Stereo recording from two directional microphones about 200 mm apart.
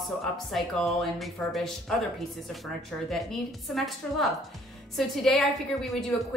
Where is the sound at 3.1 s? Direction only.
Centre (ahead or behind).